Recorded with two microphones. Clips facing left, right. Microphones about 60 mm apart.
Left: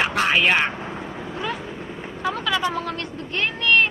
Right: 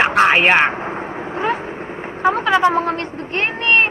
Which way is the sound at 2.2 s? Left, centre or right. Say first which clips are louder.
Right 9 dB; right.